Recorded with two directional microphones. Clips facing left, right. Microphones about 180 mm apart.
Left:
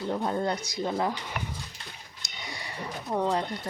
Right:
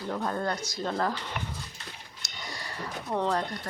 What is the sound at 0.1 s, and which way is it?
Speech, 20° left (ahead or behind).